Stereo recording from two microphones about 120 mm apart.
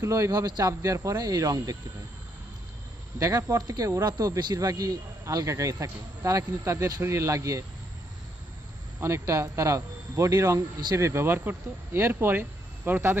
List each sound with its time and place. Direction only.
0.0 s speech: 25° right (ahead or behind)
3.2 s speech: 30° right (ahead or behind)
9.0 s speech: 20° right (ahead or behind)